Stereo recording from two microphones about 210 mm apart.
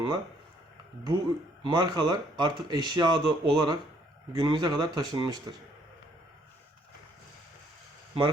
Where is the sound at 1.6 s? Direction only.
20° right (ahead or behind).